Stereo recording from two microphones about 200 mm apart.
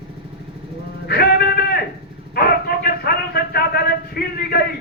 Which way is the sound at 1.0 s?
50° left (ahead or behind).